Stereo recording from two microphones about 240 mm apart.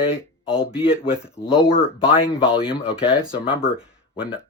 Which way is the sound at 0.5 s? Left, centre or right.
Centre.